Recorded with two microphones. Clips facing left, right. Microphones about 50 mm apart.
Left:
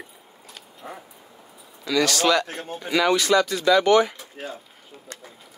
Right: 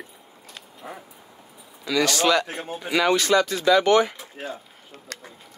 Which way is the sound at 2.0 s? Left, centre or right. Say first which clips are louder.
Even; centre.